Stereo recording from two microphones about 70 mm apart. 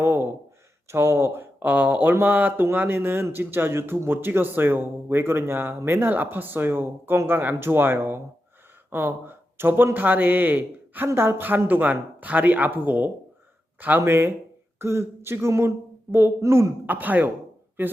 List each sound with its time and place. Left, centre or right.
0.0 s a sound: right
0.9 s speech: right
16.8 s speech: right